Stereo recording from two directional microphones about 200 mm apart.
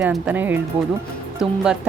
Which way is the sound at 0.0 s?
5° right (ahead or behind).